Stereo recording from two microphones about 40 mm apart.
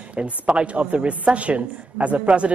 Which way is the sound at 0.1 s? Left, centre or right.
Right.